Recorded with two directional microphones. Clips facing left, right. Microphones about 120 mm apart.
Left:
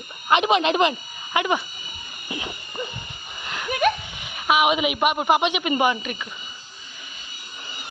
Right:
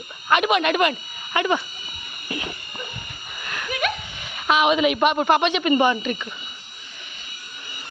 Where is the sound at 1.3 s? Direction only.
15° left (ahead or behind).